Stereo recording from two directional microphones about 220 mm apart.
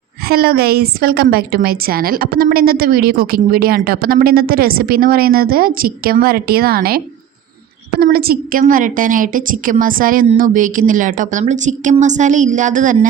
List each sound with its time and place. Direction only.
0.3 s a woman's voice: 45° right (ahead or behind)